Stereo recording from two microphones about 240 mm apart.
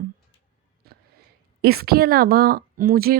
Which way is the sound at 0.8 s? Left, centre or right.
Right.